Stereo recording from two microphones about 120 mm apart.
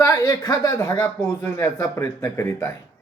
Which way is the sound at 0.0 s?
30° left (ahead or behind).